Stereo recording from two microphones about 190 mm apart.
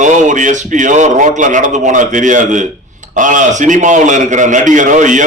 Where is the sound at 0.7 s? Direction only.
40° right (ahead or behind).